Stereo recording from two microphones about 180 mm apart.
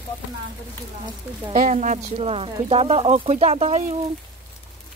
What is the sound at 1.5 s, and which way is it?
Speech, 45° right (ahead or behind).